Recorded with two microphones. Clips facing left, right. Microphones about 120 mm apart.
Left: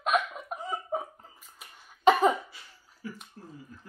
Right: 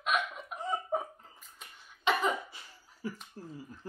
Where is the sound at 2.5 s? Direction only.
30° right (ahead or behind).